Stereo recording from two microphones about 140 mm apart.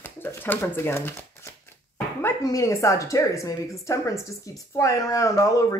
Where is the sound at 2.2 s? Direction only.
20° left (ahead or behind).